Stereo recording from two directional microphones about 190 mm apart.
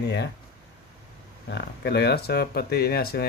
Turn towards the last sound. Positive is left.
turn(degrees=55)  # may be behind; listen again after turning